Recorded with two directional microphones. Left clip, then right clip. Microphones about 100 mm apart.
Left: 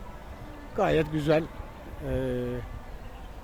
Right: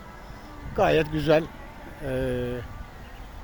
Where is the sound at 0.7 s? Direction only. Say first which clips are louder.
Right 3 dB; 10° left (ahead or behind).